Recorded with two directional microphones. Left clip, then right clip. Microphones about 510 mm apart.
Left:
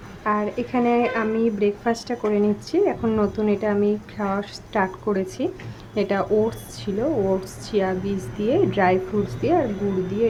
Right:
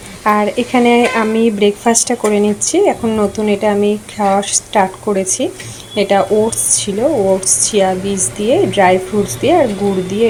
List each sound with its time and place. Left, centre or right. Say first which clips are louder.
0.3 s speech: right 11 dB; left